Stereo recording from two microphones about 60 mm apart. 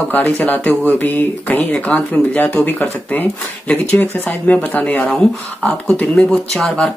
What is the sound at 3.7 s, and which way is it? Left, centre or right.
Speech, left.